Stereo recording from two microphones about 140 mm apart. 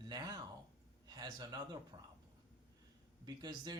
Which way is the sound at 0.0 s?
30° right (ahead or behind).